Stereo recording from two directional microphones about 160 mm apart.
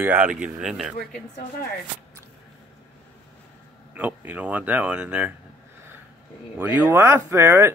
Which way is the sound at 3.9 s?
10° right (ahead or behind).